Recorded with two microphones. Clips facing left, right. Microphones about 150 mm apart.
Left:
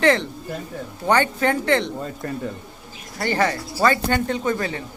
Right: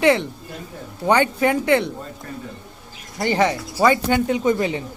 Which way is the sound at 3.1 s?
15° right (ahead or behind).